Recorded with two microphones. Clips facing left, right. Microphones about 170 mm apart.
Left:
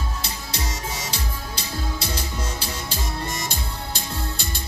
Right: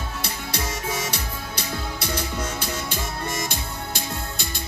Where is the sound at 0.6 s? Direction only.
55° right (ahead or behind).